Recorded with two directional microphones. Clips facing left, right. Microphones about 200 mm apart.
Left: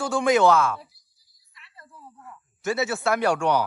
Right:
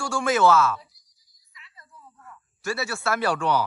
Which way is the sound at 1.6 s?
60° left (ahead or behind).